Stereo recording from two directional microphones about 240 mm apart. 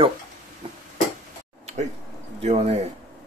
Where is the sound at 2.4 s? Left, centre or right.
Right.